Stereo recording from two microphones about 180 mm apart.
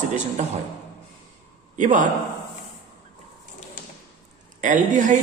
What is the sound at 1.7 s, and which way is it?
Speech, 45° right (ahead or behind).